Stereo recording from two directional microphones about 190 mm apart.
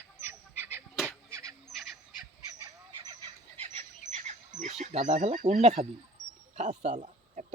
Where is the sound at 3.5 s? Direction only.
35° right (ahead or behind).